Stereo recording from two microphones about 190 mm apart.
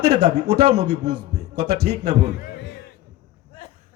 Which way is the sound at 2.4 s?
60° left (ahead or behind).